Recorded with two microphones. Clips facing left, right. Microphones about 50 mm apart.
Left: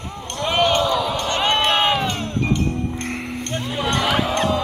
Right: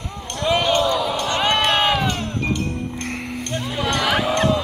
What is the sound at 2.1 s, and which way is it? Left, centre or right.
Music, left.